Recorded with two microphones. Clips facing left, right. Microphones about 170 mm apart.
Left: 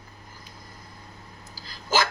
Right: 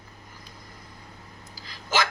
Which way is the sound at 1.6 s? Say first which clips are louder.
Left 2 dB; 35° left (ahead or behind).